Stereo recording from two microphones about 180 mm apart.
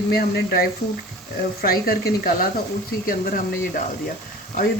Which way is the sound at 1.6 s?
55° left (ahead or behind).